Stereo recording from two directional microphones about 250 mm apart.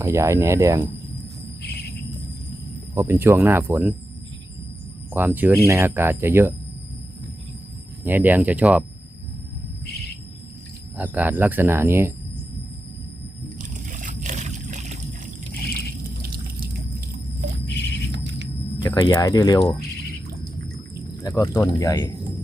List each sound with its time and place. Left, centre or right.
0.0 s speech: centre
2.9 s speech: centre
5.1 s speech: centre
8.0 s speech: centre
9.8 s bird: left
10.9 s speech: centre
13.6 s a sound: right
15.6 s a sound: left
16.2 s water: right
18.1 s rumble: right
18.8 s speech: centre
21.2 s speech: centre